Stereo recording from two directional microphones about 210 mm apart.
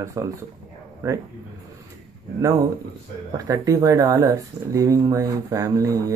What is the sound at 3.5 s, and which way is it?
Speech, 15° right (ahead or behind).